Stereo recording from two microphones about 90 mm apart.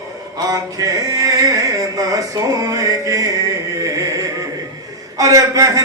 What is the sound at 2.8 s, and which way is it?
Music, 40° right (ahead or behind).